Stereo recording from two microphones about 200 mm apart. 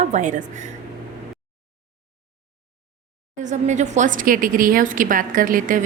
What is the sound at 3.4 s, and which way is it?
A woman's voice, 35° right (ahead or behind).